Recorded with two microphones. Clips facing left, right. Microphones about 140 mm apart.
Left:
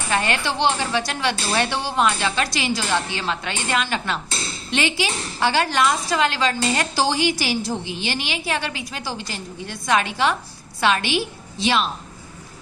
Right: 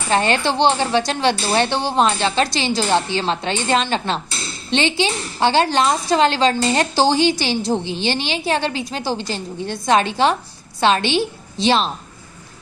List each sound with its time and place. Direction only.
0.1 s a woman's voice: 30° right (ahead or behind)